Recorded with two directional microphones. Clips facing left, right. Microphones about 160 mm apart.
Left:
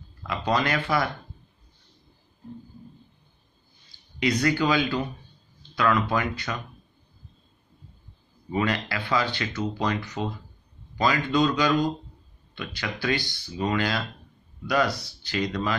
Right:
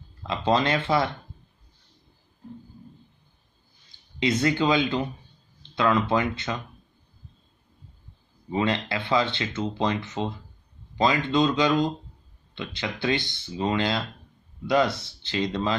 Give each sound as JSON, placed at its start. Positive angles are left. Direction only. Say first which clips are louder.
{"t": 0.2, "sound": "speech", "louder": "right 2 dB", "side_deg": -25}
{"t": 3.9, "sound": "speech", "louder": "even", "side_deg": -25}
{"t": 8.5, "sound": "speech", "louder": "right 1 dB", "side_deg": -25}